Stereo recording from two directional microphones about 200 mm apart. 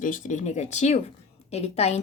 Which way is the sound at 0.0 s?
40° left (ahead or behind).